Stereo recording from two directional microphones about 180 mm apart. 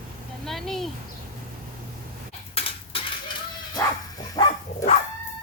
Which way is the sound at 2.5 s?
30° left (ahead or behind).